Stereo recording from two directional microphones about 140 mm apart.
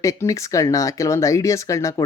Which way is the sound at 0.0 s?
25° left (ahead or behind).